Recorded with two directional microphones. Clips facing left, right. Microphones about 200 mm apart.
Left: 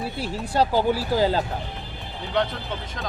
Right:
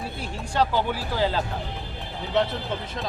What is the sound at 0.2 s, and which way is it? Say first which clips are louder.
Speech: left 2 dB; 35° left (ahead or behind).